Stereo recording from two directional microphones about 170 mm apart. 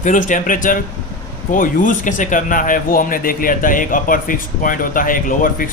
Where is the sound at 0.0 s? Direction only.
50° left (ahead or behind).